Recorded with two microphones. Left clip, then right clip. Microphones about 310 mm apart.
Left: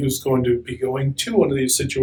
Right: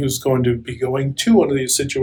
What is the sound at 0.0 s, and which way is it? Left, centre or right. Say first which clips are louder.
Speech: right 2 dB; right.